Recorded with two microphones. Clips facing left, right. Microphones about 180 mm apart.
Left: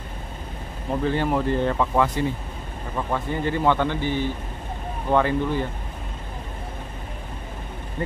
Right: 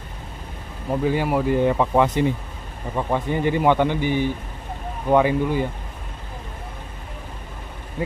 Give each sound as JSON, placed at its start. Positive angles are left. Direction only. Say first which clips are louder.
{"t": 1.0, "sound": "speech", "louder": "right 2 dB", "side_deg": -10}